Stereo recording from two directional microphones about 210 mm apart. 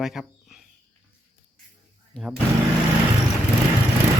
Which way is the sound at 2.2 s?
Centre (ahead or behind).